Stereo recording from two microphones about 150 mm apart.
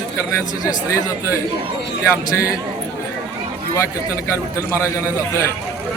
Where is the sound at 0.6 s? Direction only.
25° left (ahead or behind).